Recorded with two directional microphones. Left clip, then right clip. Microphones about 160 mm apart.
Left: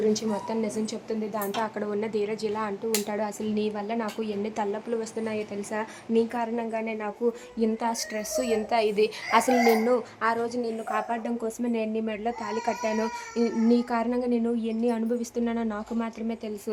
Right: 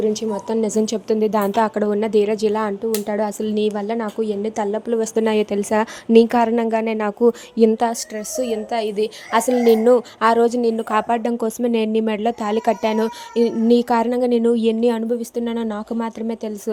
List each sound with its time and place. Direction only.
0.0 s a woman's voice: 30° right (ahead or behind)
0.6 s a woman's voice: 45° right (ahead or behind)
1.0 s a woman's voice: 60° right (ahead or behind)
1.5 s speech: 35° right (ahead or behind)
8.4 s a woman's voice: 15° right (ahead or behind)
9.6 s speech: 35° right (ahead or behind)